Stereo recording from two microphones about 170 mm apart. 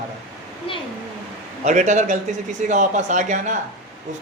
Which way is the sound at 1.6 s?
45° right (ahead or behind).